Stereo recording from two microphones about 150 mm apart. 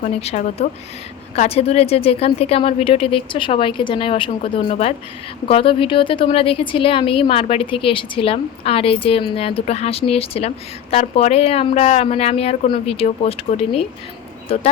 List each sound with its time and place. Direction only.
0.0 s a woman's voice: 50° left (ahead or behind)